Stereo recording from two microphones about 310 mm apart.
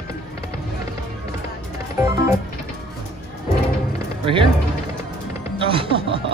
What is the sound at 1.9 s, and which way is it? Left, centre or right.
Music, centre.